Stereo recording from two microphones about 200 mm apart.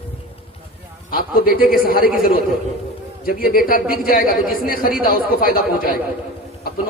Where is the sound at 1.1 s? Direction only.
45° left (ahead or behind).